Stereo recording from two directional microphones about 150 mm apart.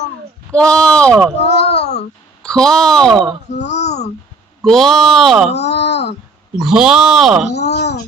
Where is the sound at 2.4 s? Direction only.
5° left (ahead or behind).